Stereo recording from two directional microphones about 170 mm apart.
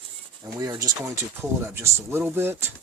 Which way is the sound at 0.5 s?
20° right (ahead or behind).